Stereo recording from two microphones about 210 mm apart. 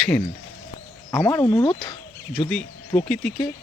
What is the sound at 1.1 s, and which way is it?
Speech, 10° left (ahead or behind).